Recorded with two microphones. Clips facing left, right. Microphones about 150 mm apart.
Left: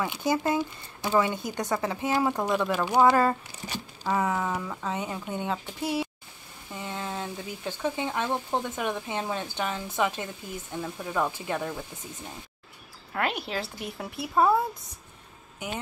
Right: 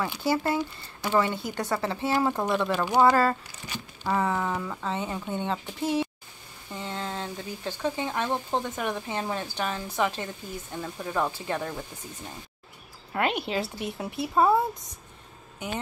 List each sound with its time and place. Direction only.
0.0 s speech: 15° left (ahead or behind)
8.5 s speech: 15° right (ahead or behind)
9.0 s a woman's voice: 15° left (ahead or behind)
13.2 s a woman's voice: centre (ahead or behind)